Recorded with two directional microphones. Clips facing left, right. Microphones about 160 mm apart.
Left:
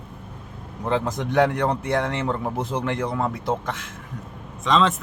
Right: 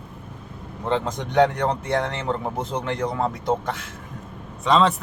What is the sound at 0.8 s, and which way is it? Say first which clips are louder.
Speech: left 1 dB; 5° left (ahead or behind).